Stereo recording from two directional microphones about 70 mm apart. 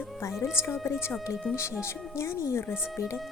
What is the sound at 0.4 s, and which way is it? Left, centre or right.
A woman's voice, left.